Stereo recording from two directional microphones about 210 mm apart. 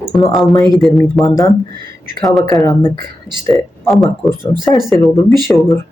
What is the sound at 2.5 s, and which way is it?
Speech, 20° left (ahead or behind).